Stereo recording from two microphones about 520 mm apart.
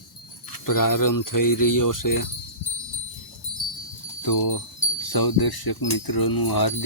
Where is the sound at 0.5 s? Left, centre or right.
Left.